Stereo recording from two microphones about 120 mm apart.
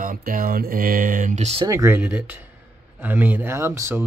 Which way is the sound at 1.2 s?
70° right (ahead or behind).